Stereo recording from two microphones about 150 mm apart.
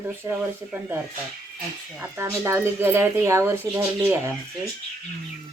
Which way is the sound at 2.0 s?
15° right (ahead or behind).